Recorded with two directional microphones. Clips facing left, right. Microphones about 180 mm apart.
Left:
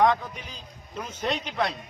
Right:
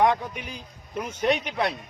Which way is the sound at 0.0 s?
10° right (ahead or behind).